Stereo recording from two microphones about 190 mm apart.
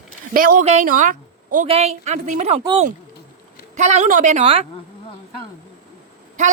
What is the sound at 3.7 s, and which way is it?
Speech, 40° right (ahead or behind).